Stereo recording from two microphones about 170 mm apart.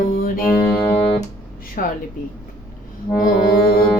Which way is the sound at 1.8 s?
55° left (ahead or behind).